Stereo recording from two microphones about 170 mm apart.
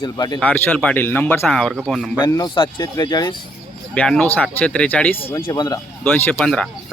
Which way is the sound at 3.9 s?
5° left (ahead or behind).